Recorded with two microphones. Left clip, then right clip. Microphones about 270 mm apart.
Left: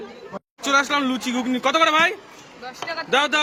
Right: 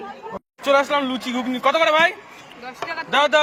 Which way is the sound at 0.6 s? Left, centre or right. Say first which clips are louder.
Right 2 dB; centre.